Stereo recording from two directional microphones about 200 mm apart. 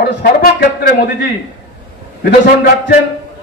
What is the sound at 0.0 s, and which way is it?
Speech, 55° left (ahead or behind).